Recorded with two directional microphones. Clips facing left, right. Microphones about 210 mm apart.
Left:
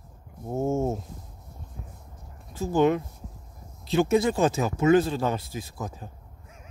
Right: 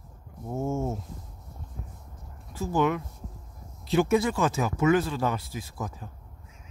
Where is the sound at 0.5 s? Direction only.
20° left (ahead or behind).